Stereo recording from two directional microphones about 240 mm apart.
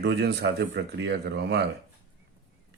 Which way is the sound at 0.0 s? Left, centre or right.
Right.